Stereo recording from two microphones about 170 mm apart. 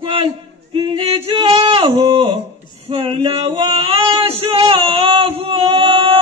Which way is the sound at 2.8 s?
35° right (ahead or behind).